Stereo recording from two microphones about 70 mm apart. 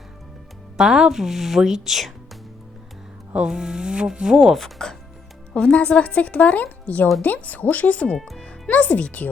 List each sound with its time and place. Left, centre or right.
0.8 s speech: centre
4.5 s speech: centre
5.5 s speech: centre